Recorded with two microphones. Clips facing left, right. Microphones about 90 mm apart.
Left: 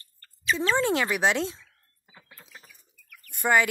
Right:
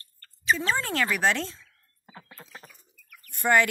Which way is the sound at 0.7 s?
20° left (ahead or behind).